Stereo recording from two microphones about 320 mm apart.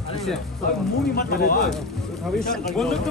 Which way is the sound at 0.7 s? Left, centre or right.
Left.